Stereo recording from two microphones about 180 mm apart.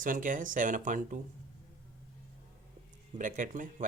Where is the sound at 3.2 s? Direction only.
45° right (ahead or behind).